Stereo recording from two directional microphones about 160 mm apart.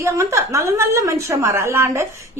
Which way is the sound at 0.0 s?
20° right (ahead or behind).